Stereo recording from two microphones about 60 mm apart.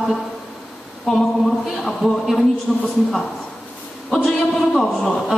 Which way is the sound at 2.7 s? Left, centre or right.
Centre.